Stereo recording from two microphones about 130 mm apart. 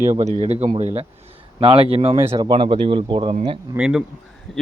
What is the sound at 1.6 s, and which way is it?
Speech, 45° right (ahead or behind).